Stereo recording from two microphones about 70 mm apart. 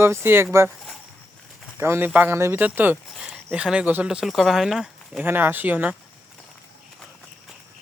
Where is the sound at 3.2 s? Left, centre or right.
Centre.